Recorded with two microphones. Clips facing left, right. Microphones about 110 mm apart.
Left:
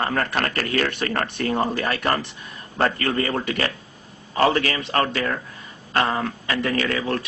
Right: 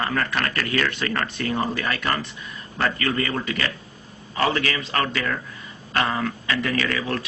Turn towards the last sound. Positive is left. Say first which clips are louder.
# left 2 dB
turn(degrees=35)  # may be behind; listen again after turning